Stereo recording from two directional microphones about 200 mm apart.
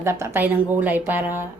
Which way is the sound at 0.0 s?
15° right (ahead or behind).